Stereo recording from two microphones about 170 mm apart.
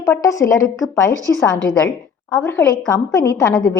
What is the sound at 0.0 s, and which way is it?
A woman's voice, 15° left (ahead or behind).